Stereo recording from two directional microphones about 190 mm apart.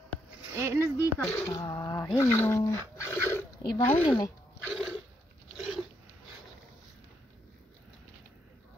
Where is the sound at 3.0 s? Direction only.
15° left (ahead or behind).